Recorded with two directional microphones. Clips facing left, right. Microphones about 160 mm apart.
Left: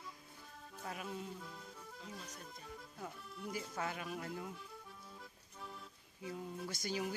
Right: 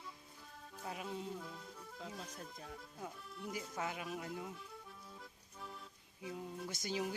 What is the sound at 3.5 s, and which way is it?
Speech, 15° right (ahead or behind).